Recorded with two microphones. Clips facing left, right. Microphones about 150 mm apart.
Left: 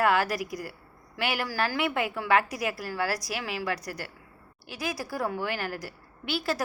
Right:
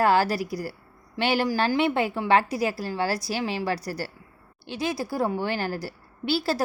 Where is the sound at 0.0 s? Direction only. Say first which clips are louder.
Right 4 dB; 30° right (ahead or behind).